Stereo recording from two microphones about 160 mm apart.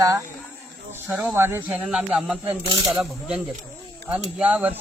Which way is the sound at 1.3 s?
15° right (ahead or behind).